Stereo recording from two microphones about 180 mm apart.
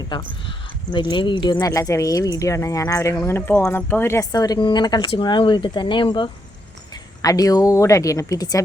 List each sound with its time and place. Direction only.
0.1 s speech: 30° left (ahead or behind)